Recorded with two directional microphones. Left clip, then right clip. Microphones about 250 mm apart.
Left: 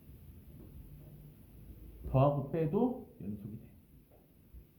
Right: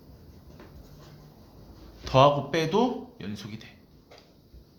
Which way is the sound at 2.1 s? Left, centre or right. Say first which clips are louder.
Right 11 dB; right.